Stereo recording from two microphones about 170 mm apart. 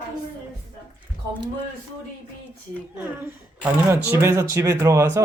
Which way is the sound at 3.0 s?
10° right (ahead or behind).